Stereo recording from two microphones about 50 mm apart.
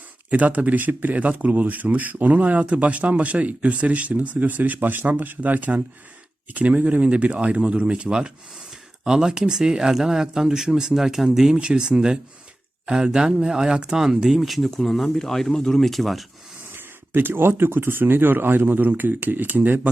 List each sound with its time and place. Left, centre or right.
0.3 s speech: right; by 16.2 s centre
16.7 s speech: right